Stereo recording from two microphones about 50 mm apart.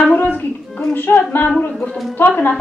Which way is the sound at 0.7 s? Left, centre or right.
Left.